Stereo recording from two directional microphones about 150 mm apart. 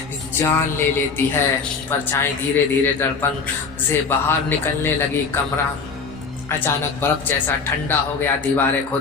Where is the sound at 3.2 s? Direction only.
15° left (ahead or behind).